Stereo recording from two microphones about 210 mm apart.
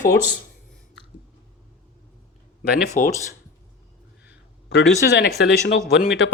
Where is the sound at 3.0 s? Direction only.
40° left (ahead or behind).